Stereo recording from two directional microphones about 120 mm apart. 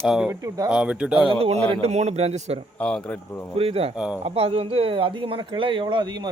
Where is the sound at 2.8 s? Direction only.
10° left (ahead or behind).